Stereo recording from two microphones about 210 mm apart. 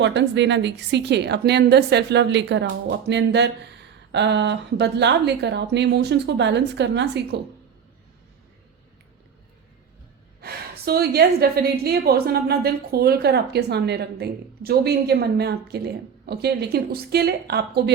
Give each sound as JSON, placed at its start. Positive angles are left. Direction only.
{"t": 0.0, "sound": "speech", "side_deg": -55}
{"t": 10.4, "sound": "a woman's voice", "side_deg": -45}